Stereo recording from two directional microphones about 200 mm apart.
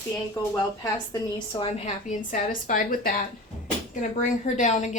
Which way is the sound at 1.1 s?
20° left (ahead or behind).